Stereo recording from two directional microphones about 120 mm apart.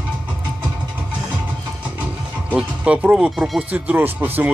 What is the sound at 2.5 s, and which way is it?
Speech, 10° right (ahead or behind).